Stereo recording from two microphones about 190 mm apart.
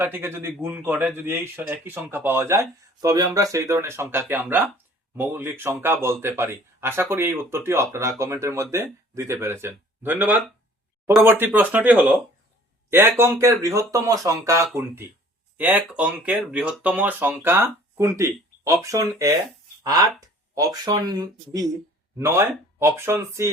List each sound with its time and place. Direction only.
0.0 s a man's voice: 10° right (ahead or behind)